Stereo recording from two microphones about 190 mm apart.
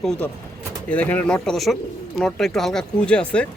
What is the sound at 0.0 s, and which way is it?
Speech, 5° left (ahead or behind).